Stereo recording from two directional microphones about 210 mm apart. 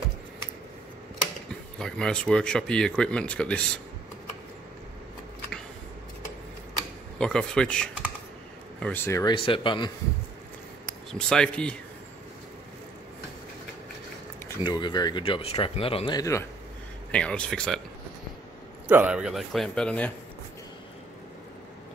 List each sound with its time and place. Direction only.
1.5 s speech: 5° left (ahead or behind)
7.2 s speech: 5° left (ahead or behind); by 9.8 s 25° left (ahead or behind)
11.1 s speech: 5° left (ahead or behind)
14.5 s speech: 20° left (ahead or behind)
17.1 s speech: 5° left (ahead or behind)
18.9 s speech: 5° right (ahead or behind)